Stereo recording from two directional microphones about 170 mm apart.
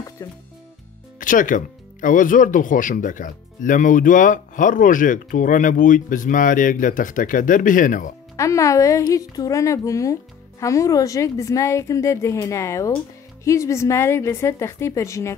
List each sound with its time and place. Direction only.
0.2 s speech: 20° left (ahead or behind)
1.2 s speech: 50° left (ahead or behind)
8.4 s a woman's voice: 20° left (ahead or behind)